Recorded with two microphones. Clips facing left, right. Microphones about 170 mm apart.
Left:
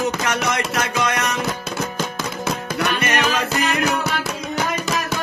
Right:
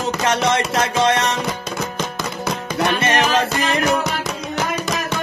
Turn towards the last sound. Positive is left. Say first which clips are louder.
# right 2 dB
turn(degrees=-25)  # may be behind; listen again after turning